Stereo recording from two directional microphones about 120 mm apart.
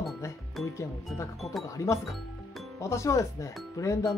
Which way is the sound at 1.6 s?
25° left (ahead or behind).